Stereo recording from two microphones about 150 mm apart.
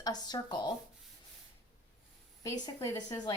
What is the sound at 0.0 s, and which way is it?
Speech, 25° left (ahead or behind).